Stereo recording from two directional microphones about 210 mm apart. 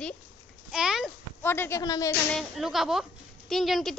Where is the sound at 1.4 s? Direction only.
10° left (ahead or behind).